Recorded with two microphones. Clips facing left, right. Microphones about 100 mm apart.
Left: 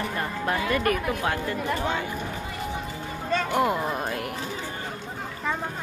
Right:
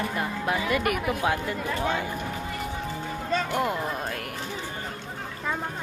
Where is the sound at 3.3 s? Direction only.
Centre (ahead or behind).